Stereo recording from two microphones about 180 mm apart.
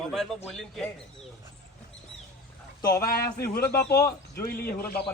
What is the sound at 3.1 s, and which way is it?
Speech, 60° left (ahead or behind).